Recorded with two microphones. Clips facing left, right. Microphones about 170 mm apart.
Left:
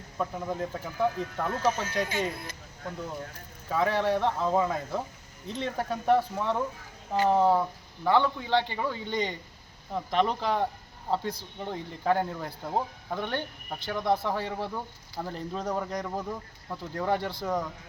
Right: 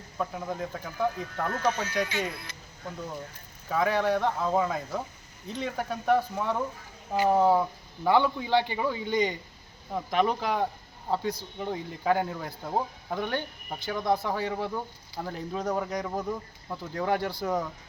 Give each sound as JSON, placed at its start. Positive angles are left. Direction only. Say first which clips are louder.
{"t": 0.2, "sound": "speech", "louder": "left 1 dB", "side_deg": 0}
{"t": 1.5, "sound": "speech", "louder": "even", "side_deg": 45}
{"t": 3.7, "sound": "a man's voice", "louder": "even", "side_deg": 0}